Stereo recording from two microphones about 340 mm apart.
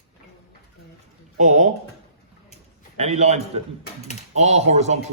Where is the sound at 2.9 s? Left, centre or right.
Centre.